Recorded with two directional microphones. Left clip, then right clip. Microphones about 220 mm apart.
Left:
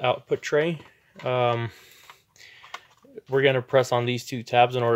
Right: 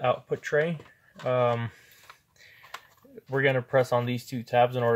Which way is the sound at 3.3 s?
45° left (ahead or behind).